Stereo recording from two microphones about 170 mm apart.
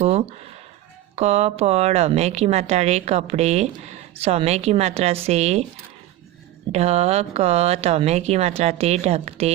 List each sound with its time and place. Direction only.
0.0 s a woman's voice: 35° right (ahead or behind)
6.7 s a woman's voice: 40° right (ahead or behind)